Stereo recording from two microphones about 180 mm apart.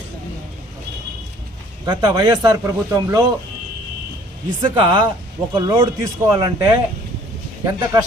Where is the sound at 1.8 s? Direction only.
25° right (ahead or behind).